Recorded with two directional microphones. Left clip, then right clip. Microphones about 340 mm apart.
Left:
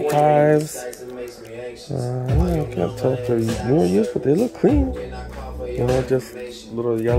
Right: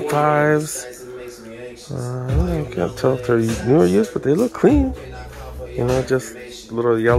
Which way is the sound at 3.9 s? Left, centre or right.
Centre.